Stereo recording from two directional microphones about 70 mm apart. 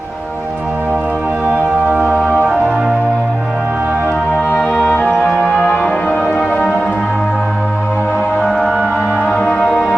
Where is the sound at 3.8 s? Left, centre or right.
Right.